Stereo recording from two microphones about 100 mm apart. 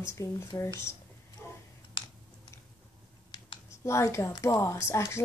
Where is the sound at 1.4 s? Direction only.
25° left (ahead or behind).